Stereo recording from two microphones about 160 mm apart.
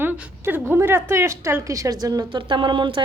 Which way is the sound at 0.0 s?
10° right (ahead or behind).